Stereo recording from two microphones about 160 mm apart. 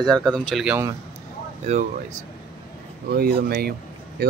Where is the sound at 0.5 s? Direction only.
Centre (ahead or behind).